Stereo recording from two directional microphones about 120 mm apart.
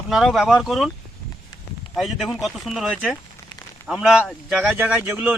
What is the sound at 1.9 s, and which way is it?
Speech, centre (ahead or behind).